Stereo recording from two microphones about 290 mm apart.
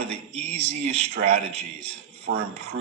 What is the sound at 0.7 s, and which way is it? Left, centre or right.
Speech, right.